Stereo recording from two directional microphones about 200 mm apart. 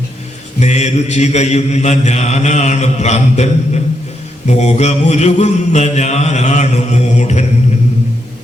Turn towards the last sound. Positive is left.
turn(degrees=35)  # may be behind; listen again after turning